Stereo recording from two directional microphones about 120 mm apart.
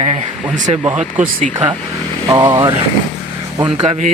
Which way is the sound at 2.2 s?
35° right (ahead or behind).